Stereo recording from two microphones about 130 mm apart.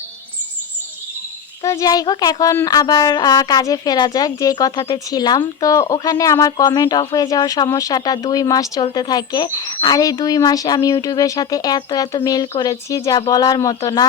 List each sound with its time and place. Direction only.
1.6 s speech: 25° left (ahead or behind)